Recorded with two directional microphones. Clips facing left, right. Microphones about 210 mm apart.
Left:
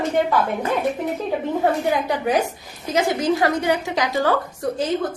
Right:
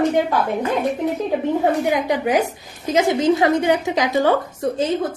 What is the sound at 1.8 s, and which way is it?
A woman's voice, 15° right (ahead or behind).